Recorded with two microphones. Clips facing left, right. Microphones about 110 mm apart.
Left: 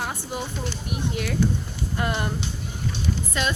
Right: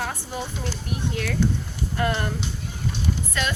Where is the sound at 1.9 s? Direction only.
15° left (ahead or behind).